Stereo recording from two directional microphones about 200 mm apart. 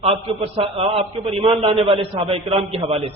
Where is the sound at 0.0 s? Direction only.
30° right (ahead or behind).